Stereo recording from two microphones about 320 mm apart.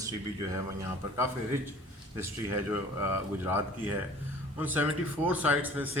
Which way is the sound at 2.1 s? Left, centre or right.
Centre.